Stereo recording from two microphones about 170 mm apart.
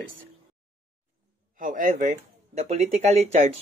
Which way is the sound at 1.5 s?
50° right (ahead or behind).